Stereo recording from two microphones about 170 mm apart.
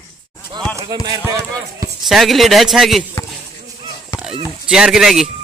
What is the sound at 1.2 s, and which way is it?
Speech, 15° right (ahead or behind).